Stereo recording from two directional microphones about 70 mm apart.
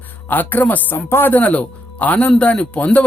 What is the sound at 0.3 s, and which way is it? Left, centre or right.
Speech, left.